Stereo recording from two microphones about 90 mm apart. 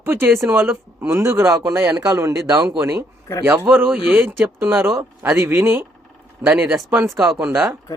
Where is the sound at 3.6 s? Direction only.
25° right (ahead or behind).